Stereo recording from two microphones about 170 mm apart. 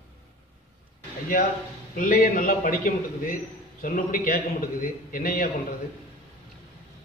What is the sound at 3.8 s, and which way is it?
A man's voice, 50° left (ahead or behind).